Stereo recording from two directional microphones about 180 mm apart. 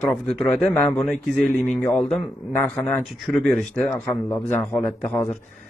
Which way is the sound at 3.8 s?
15° left (ahead or behind).